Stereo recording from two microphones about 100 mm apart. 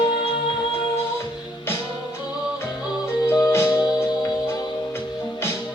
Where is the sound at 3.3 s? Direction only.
25° left (ahead or behind).